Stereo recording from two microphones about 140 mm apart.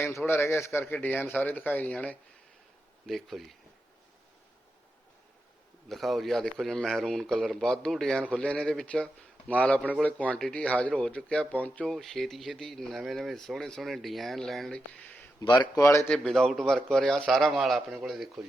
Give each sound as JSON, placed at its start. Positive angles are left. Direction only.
{"t": 0.0, "sound": "speech", "side_deg": 15}
{"t": 3.1, "sound": "speech", "side_deg": 0}
{"t": 5.9, "sound": "speech", "side_deg": 0}
{"t": 15.4, "sound": "speech", "side_deg": 30}
{"t": 16.0, "sound": "speech", "side_deg": 5}